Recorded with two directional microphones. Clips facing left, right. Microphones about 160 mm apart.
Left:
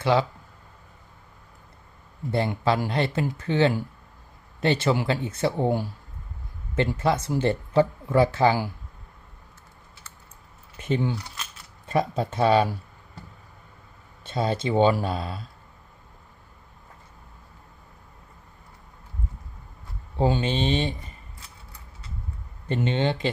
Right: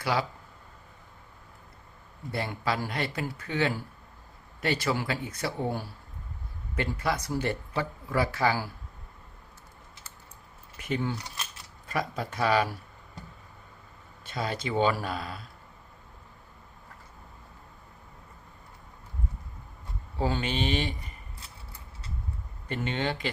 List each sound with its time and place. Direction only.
0.0 s speech: 25° left (ahead or behind)
2.3 s speech: 25° left (ahead or behind)
10.8 s speech: 25° left (ahead or behind)
14.3 s speech: 25° left (ahead or behind)
20.1 s speech: 25° left (ahead or behind)
22.7 s speech: 25° left (ahead or behind)